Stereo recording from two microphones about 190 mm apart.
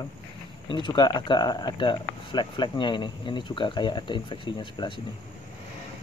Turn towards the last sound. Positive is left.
turn(degrees=25)  # may be behind; listen again after turning